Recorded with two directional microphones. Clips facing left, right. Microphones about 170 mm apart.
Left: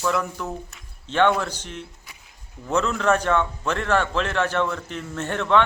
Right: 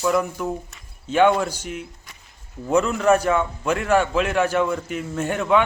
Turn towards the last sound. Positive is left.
turn(degrees=-10)  # may be behind; listen again after turning